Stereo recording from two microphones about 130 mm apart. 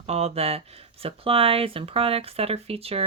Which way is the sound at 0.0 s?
55° right (ahead or behind).